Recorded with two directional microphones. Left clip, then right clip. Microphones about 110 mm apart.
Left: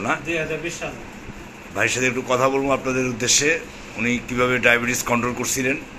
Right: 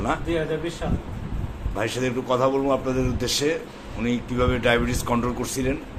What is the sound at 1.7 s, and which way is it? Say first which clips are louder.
A man's voice: left 5 dB; centre (ahead or behind).